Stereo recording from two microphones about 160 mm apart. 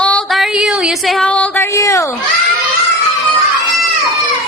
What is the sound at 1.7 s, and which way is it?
Speech, 20° left (ahead or behind).